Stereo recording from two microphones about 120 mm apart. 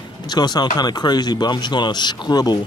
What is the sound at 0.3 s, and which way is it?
Speech, 35° left (ahead or behind).